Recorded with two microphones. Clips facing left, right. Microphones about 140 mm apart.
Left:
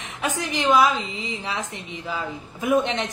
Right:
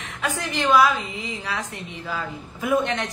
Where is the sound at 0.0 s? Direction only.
20° left (ahead or behind).